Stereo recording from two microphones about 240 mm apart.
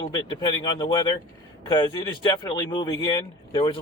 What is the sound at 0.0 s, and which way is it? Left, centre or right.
Speech, centre.